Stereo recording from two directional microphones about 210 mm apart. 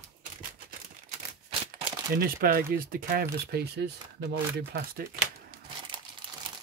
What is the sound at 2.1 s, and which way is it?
Speech, 45° right (ahead or behind).